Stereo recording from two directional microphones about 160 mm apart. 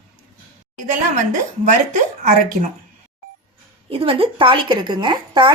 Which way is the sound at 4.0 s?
35° right (ahead or behind).